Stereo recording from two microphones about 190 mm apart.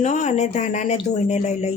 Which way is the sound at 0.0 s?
40° left (ahead or behind).